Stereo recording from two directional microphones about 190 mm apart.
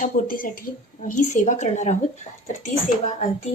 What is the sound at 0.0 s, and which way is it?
Speech, 45° left (ahead or behind).